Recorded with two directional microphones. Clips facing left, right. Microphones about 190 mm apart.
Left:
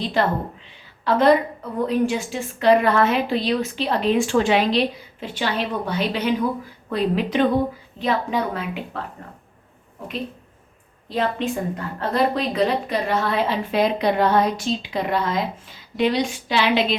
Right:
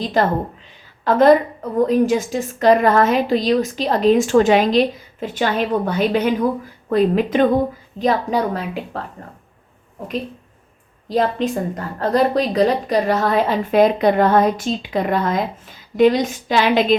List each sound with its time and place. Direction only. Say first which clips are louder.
0.0 s a woman's voice: right 3 dB; 45° right (ahead or behind)
11.1 s a woman's voice: right 4 dB; 40° right (ahead or behind)